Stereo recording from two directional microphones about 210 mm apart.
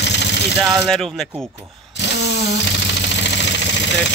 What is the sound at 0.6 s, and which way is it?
Speech, centre (ahead or behind).